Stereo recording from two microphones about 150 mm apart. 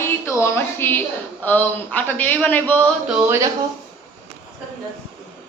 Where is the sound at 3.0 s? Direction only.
10° right (ahead or behind).